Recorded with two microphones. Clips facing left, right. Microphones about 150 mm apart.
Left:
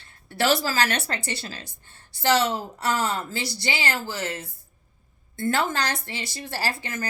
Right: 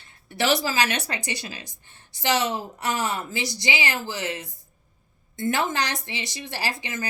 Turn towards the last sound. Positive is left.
turn(degrees=-20)  # may be behind; listen again after turning